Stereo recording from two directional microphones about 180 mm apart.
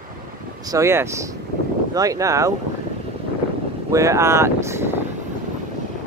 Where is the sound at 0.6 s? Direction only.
15° right (ahead or behind).